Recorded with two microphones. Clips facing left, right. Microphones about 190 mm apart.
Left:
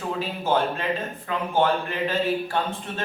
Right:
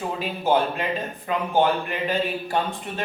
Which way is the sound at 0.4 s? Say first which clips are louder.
Right 2 dB; 15° right (ahead or behind).